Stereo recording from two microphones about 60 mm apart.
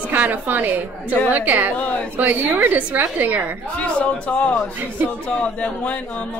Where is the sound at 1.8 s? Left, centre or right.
Left.